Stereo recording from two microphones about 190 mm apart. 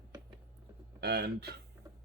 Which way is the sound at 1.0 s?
60° right (ahead or behind).